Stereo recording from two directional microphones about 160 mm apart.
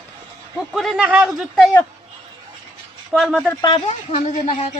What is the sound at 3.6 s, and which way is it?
Speech, 40° left (ahead or behind).